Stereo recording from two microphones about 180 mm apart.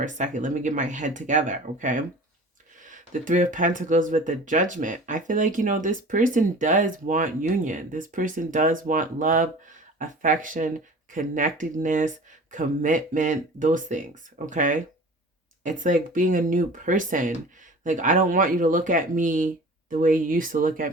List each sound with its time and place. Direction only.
0.0 s speech: 45° right (ahead or behind)